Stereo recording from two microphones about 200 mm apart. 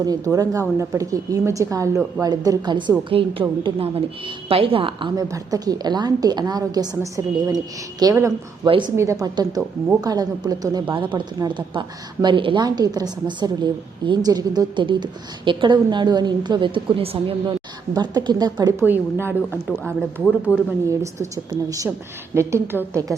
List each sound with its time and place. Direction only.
0.0 s a woman's voice: 20° right (ahead or behind)
21.3 s a woman's voice: 15° right (ahead or behind)